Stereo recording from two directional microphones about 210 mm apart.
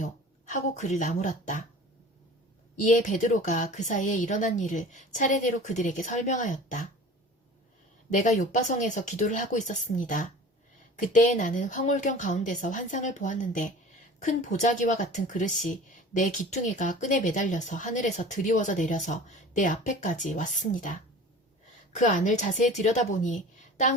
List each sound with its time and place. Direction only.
0.5 s a woman's voice: 35° left (ahead or behind)
2.7 s a woman's voice: 35° left (ahead or behind)
8.1 s a woman's voice: 35° left (ahead or behind)
21.9 s a woman's voice: 35° left (ahead or behind)